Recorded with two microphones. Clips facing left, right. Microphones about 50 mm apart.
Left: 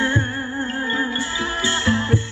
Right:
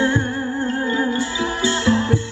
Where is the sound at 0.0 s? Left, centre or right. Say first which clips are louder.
Right 2 dB; left.